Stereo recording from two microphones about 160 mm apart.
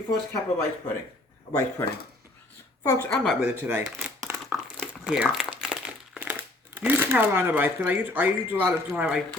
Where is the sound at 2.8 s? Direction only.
20° left (ahead or behind).